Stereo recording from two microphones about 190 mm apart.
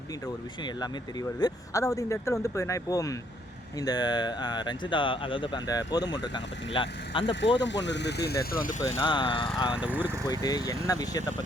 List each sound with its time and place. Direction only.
1.4 s speech: 20° left (ahead or behind)
7.3 s speech: 70° left (ahead or behind); by 8.7 s 50° left (ahead or behind)
9.0 s speech: 25° left (ahead or behind)
9.7 s speech: 5° right (ahead or behind)
10.2 s speech: 20° left (ahead or behind)